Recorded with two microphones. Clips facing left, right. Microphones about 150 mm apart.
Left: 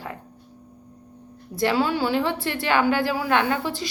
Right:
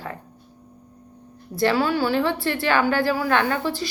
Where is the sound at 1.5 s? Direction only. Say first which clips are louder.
Right 1 dB; 20° left (ahead or behind).